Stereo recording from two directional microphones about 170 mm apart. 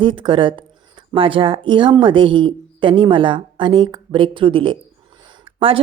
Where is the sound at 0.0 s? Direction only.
30° right (ahead or behind).